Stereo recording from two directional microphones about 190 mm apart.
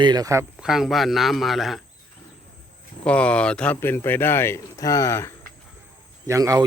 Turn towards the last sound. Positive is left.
turn(degrees=-20)  # may be behind; listen again after turning